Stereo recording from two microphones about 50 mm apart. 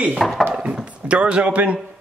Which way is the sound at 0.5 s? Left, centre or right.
Right.